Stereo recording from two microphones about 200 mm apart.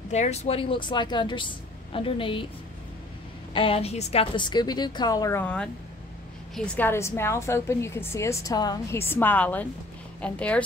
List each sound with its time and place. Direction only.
0.1 s speech: 35° left (ahead or behind)
3.5 s a woman's voice: 30° left (ahead or behind); by 10.6 s 5° left (ahead or behind)